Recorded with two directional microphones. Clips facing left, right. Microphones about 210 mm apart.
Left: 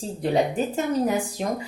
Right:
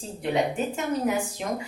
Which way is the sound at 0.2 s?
35° left (ahead or behind).